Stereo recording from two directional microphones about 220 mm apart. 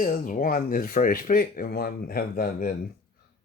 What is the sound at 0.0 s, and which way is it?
Speech, 35° left (ahead or behind).